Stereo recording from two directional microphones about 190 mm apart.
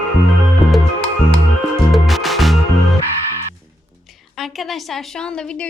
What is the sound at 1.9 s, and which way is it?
Music, centre (ahead or behind).